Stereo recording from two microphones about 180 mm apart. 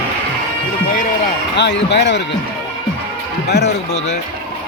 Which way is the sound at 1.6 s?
75° left (ahead or behind).